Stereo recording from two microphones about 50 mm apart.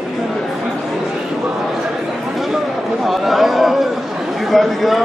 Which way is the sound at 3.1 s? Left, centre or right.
Centre.